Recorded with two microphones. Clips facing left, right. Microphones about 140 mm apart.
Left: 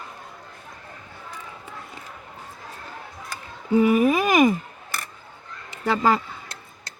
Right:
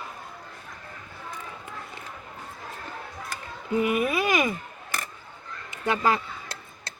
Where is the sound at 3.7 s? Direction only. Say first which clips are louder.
Left 7 dB; 35° left (ahead or behind).